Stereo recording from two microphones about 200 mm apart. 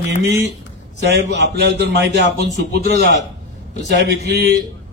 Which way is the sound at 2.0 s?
60° right (ahead or behind).